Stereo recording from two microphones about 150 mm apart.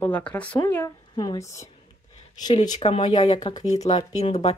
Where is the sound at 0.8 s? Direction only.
25° left (ahead or behind).